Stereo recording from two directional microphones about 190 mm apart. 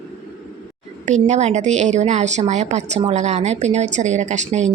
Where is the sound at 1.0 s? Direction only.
40° right (ahead or behind).